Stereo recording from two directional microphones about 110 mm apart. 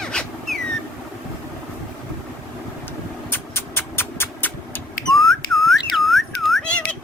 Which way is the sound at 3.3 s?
20° left (ahead or behind).